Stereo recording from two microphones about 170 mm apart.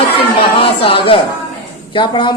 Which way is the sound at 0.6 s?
30° left (ahead or behind).